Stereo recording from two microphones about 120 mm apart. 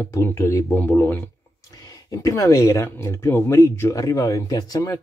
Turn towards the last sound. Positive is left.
turn(degrees=30)  # may be behind; listen again after turning